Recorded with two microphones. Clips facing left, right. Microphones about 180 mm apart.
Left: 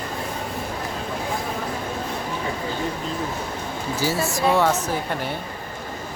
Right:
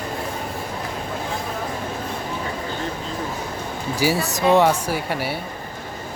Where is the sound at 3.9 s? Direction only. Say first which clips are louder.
Right 2 dB; 15° right (ahead or behind).